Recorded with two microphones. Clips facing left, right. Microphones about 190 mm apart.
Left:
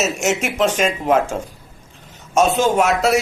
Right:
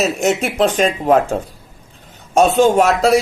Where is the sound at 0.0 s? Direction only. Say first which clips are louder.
Right 3 dB; 35° right (ahead or behind).